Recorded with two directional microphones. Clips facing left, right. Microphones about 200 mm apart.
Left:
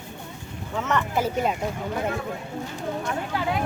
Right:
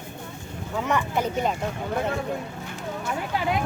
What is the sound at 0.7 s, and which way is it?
Speech, 10° right (ahead or behind).